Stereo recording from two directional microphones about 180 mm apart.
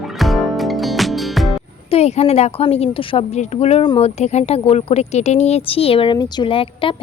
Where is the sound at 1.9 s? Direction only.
35° left (ahead or behind).